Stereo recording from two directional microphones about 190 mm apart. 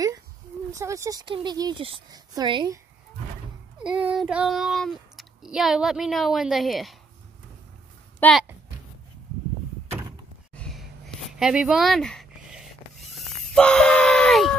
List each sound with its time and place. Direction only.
0.7 s speech: 15° right (ahead or behind)
3.8 s speech: 5° right (ahead or behind)
8.2 s speech: 5° left (ahead or behind)
10.5 s a sound: 5° left (ahead or behind)